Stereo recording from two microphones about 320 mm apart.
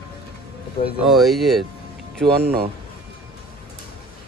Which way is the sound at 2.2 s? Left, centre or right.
Right.